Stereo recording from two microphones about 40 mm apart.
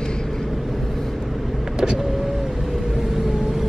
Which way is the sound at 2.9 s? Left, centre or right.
Centre.